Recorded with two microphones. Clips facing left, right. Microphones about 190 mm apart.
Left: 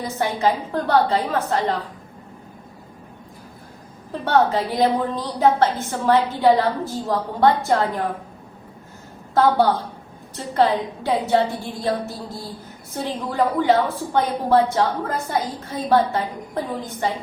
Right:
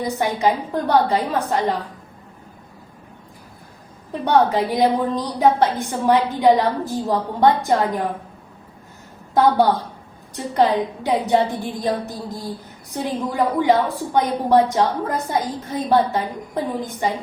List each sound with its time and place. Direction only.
0.0 s a woman's voice: 15° right (ahead or behind)
4.3 s a woman's voice: 15° right (ahead or behind)
9.3 s a woman's voice: 15° right (ahead or behind)